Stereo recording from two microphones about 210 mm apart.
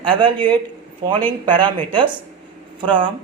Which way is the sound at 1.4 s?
25° right (ahead or behind).